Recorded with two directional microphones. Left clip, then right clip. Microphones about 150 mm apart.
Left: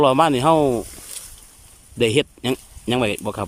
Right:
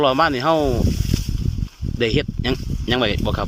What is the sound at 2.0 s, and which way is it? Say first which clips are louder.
Speech: left 2 dB; 20° left (ahead or behind).